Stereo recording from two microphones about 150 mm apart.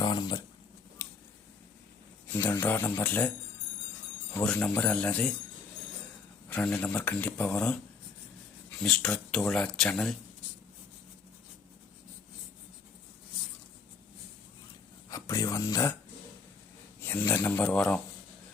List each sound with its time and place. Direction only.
0.0 s a sound: 30° left (ahead or behind)
1.0 s a sound: 15° left (ahead or behind)
2.3 s speech: 15° left (ahead or behind)
4.4 s speech: 10° left (ahead or behind)
6.5 s speech: 10° left (ahead or behind)
8.8 s speech: 5° left (ahead or behind)
15.1 s speech: 20° left (ahead or behind)
17.0 s speech: 15° left (ahead or behind)